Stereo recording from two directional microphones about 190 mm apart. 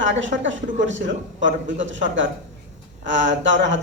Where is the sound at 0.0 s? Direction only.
75° right (ahead or behind).